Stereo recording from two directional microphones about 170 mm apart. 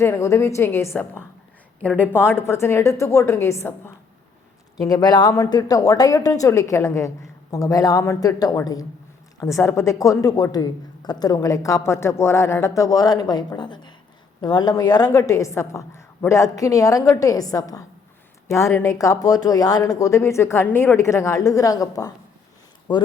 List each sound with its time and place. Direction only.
0.0 s a woman's voice: 15° left (ahead or behind)